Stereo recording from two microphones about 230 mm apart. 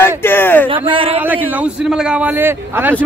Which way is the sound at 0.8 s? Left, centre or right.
Right.